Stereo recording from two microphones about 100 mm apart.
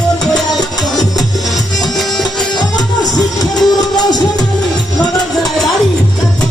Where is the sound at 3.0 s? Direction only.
40° left (ahead or behind).